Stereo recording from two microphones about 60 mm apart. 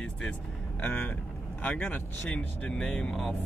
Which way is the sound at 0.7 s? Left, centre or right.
Left.